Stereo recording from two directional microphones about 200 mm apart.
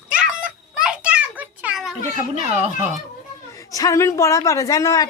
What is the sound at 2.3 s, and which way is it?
Speech, 35° right (ahead or behind).